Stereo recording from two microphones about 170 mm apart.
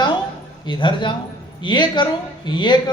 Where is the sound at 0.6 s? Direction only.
30° left (ahead or behind).